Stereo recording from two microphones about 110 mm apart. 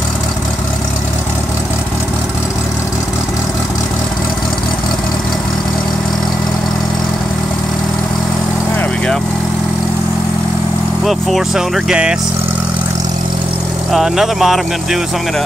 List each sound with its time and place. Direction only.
11.1 s speech: centre (ahead or behind)
13.9 s speech: 5° right (ahead or behind)